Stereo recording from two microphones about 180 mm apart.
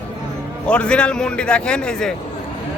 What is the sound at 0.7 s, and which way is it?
A man's voice, 5° left (ahead or behind).